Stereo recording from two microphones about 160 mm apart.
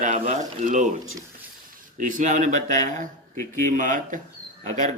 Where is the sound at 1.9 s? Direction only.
50° right (ahead or behind).